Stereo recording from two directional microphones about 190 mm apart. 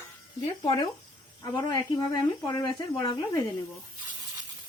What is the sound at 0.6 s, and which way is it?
Speech, 20° left (ahead or behind).